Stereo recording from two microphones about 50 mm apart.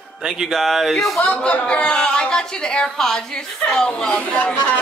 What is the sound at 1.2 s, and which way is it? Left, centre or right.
Speech, left.